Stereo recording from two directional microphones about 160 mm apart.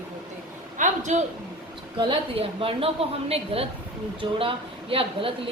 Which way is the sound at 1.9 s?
35° right (ahead or behind).